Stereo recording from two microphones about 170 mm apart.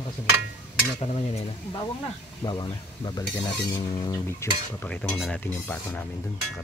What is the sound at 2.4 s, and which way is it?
Stir, 25° left (ahead or behind).